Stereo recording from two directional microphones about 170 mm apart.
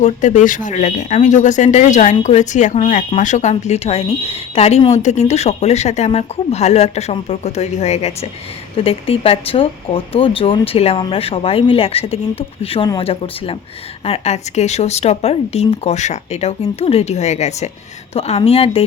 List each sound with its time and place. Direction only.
0.0 s a woman's voice: 45° left (ahead or behind)